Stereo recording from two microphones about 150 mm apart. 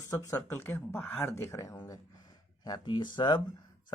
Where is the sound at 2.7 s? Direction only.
30° left (ahead or behind).